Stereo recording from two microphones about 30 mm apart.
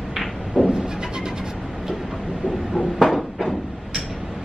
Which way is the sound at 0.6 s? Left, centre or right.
Right.